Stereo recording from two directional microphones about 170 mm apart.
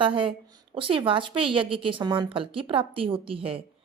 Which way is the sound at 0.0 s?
30° right (ahead or behind).